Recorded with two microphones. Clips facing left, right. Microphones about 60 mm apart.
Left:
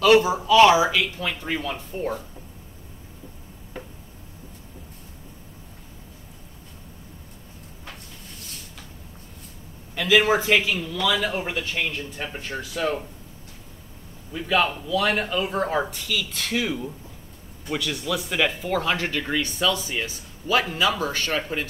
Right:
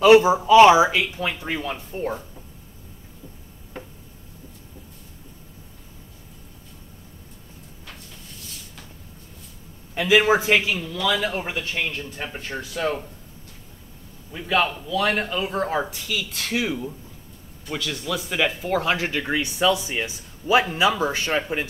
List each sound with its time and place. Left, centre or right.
0.0 s speech: right
9.9 s speech: centre
14.3 s a man's voice: centre